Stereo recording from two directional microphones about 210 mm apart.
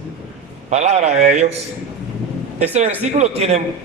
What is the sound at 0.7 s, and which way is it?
Speech, 30° right (ahead or behind).